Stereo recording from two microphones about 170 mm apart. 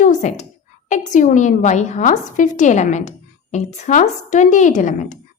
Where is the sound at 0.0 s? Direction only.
45° left (ahead or behind).